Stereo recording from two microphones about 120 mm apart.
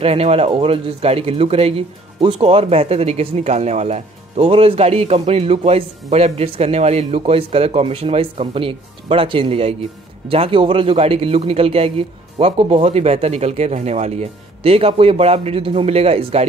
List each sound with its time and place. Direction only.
0.0 s speech: 60° right (ahead or behind)